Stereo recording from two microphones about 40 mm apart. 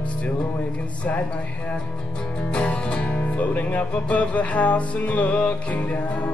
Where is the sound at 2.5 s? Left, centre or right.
Left.